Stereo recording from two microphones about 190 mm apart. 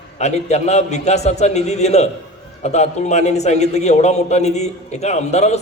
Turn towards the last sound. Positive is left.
turn(degrees=35)  # may be behind; listen again after turning